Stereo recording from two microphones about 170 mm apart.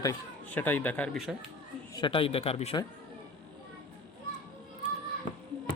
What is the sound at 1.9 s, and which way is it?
Speech, 30° left (ahead or behind).